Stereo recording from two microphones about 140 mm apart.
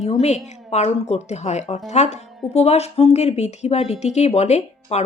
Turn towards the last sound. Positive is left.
turn(degrees=50)  # may be behind; listen again after turning